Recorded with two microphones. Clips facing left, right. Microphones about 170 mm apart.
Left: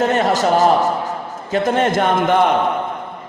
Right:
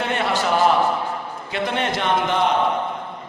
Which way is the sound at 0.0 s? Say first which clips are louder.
Left 6 dB; 40° left (ahead or behind).